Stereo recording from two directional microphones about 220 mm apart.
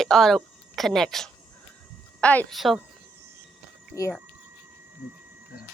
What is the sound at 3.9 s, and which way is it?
Speech, 15° left (ahead or behind).